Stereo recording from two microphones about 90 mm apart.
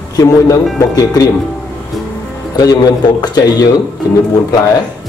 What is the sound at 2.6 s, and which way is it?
A man's voice, 45° left (ahead or behind).